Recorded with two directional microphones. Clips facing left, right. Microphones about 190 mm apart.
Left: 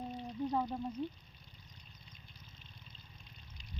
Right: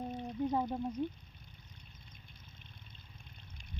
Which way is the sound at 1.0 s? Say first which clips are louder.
Right 3 dB; 15° right (ahead or behind).